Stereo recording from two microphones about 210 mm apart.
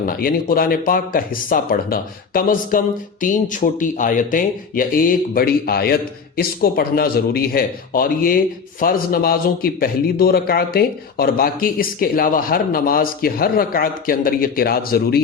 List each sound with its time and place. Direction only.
0.0 s speech: 45° left (ahead or behind)